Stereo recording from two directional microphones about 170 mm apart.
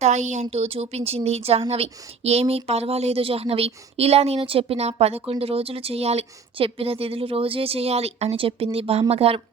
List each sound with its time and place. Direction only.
0.0 s a woman's voice: 45° right (ahead or behind)